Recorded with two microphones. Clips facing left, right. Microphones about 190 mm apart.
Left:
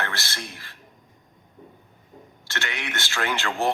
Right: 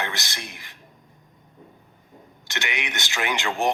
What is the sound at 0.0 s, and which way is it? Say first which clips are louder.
Speech: even; 15° right (ahead or behind).